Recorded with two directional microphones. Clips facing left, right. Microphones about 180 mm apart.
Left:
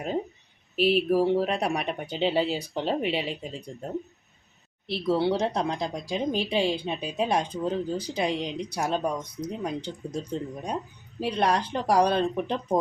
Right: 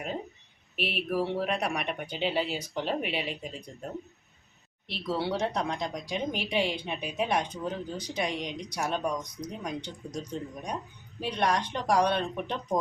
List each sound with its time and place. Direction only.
0.8 s speech: 30° left (ahead or behind)
4.9 s speech: 25° left (ahead or behind)